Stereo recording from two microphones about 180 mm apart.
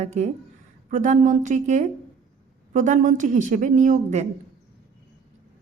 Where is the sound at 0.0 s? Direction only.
40° right (ahead or behind).